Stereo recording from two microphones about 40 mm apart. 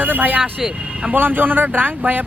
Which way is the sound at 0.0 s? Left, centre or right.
Right.